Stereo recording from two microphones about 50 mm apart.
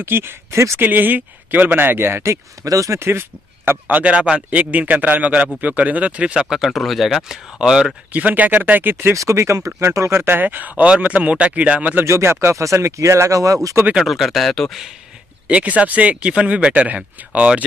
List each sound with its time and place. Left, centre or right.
0.0 s speech: right
0.8 s speech: right
2.6 s speech: right
3.1 s speech: right
3.8 s speech: right
6.5 s speech: centre
8.1 s speech: right
9.1 s speech: right
10.1 s speech: right
10.4 s speech: right
12.0 s speech: right
13.9 s speech: centre
15.4 s speech: right